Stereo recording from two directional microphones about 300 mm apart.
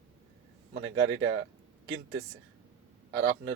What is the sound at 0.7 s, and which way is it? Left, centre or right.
Speech, right.